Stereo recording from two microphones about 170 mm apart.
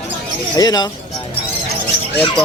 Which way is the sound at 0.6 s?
25° left (ahead or behind).